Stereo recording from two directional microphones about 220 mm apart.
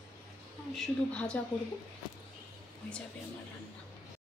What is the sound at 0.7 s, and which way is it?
Speech, 5° left (ahead or behind).